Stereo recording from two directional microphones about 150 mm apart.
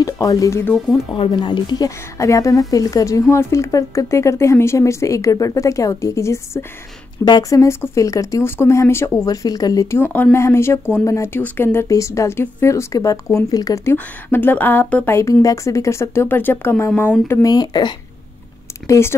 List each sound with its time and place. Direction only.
0.0 s speech: 25° left (ahead or behind)
1.1 s speech: 35° left (ahead or behind)
13.9 s a woman's voice: 10° left (ahead or behind)
18.9 s a woman's voice: 15° left (ahead or behind)